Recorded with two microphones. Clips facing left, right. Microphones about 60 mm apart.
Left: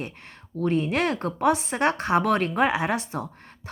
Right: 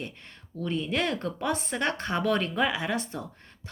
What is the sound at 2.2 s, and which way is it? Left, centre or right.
Speech, left.